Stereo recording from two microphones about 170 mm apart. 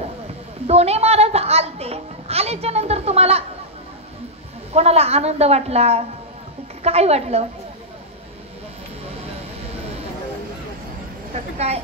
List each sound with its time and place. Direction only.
0.7 s a sound: 40° right (ahead or behind)
4.7 s a woman's voice: 40° right (ahead or behind)
11.3 s a woman's voice: 40° right (ahead or behind)